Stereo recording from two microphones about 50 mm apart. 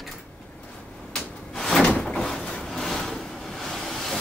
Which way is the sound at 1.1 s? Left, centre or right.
Centre.